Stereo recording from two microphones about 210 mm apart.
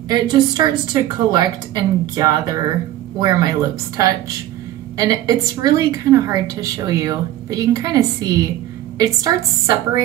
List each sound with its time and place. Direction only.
0.1 s a woman's voice: 20° right (ahead or behind)